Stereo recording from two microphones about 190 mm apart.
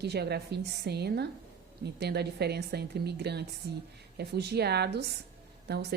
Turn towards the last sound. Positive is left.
turn(degrees=-60)  # may be behind; listen again after turning